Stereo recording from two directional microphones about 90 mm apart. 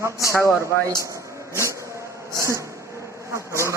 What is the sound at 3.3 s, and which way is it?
Bee, 35° right (ahead or behind).